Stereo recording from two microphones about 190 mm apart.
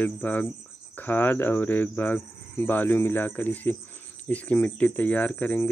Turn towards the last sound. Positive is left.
turn(degrees=10)  # may be behind; listen again after turning